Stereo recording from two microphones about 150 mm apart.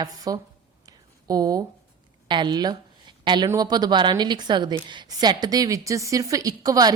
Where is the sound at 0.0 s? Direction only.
25° right (ahead or behind).